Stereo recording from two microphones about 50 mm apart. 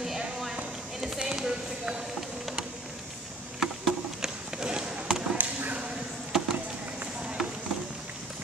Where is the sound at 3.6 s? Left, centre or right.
Centre.